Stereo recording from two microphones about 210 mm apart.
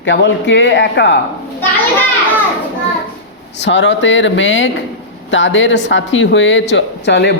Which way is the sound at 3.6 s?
55° left (ahead or behind).